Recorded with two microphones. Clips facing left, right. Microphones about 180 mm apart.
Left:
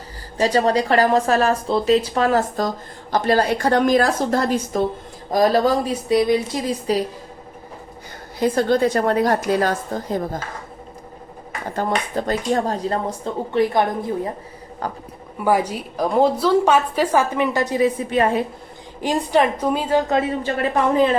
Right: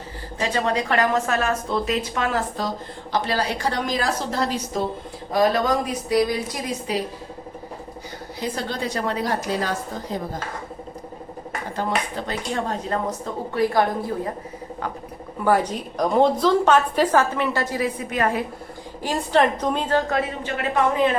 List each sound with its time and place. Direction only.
0.3 s a woman's voice: 35° left (ahead or behind); by 4.8 s 50° left (ahead or behind)
5.3 s a woman's voice: 40° left (ahead or behind)
8.4 s a woman's voice: 50° left (ahead or behind)
11.8 s a woman's voice: 45° left (ahead or behind); by 14.1 s 20° left (ahead or behind)
15.4 s a woman's voice: 10° left (ahead or behind); by 18.4 s 25° left (ahead or behind)
19.0 s a woman's voice: 10° left (ahead or behind)
20.4 s a woman's voice: 35° left (ahead or behind)